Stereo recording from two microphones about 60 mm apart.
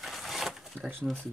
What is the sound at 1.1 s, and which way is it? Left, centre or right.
Speech, right.